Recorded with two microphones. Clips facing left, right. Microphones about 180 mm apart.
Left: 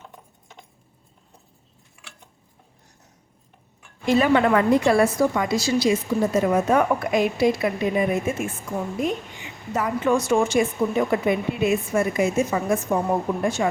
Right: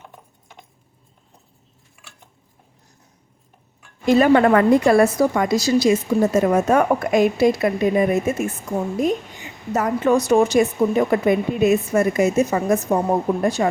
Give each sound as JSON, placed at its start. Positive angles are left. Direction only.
{"t": 4.0, "sound": "a woman's voice", "side_deg": -45}
{"t": 9.7, "sound": "a woman's voice", "side_deg": -40}